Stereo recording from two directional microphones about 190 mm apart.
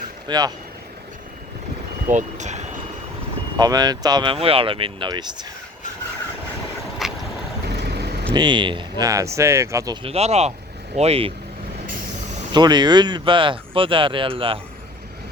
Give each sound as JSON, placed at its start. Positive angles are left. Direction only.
{"t": 0.3, "sound": "speech", "side_deg": -20}
{"t": 2.0, "sound": "speech", "side_deg": -40}
{"t": 3.6, "sound": "speech", "side_deg": -20}
{"t": 7.0, "sound": "vehicle", "side_deg": 0}
{"t": 7.7, "sound": "vehicle", "side_deg": -60}
{"t": 8.3, "sound": "speech", "side_deg": -25}
{"t": 12.5, "sound": "speech", "side_deg": -20}